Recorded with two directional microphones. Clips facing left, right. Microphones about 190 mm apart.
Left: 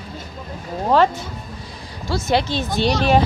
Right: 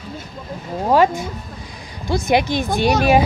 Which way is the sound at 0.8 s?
10° right (ahead or behind).